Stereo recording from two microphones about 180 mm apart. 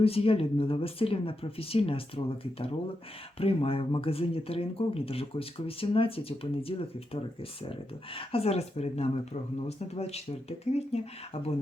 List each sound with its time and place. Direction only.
0.0 s speech: 30° left (ahead or behind)
8.3 s speech: 35° left (ahead or behind)